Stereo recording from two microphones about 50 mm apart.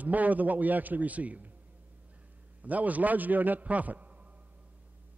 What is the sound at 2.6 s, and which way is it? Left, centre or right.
A man's voice, right.